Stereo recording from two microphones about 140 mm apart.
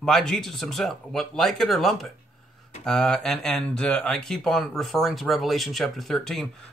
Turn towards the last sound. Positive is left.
turn(degrees=0)  # may be behind; listen again after turning